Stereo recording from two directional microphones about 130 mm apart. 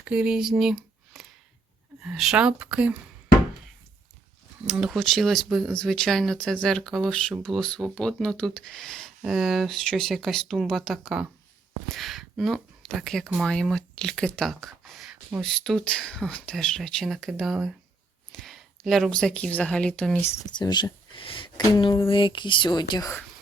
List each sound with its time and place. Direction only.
0.1 s speech: 5° right (ahead or behind)
4.6 s speech: 5° right (ahead or behind)
11.9 s a sound: centre (ahead or behind)
13.2 s speech: 5° right (ahead or behind)
13.5 s a woman's voice: 5° left (ahead or behind)
20.6 s speech: 35° left (ahead or behind)